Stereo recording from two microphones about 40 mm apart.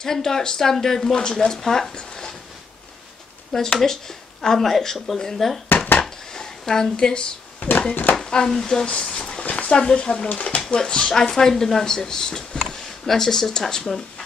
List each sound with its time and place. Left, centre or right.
0.0 s speech: centre
3.5 s speech: centre
6.0 s a sound: centre
7.9 s speech: left
8.2 s speech: centre
8.8 s speech: left
10.8 s speech: centre
11.2 s speech: centre